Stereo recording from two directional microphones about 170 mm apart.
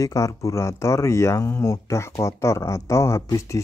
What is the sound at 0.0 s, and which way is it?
Speech, 20° left (ahead or behind).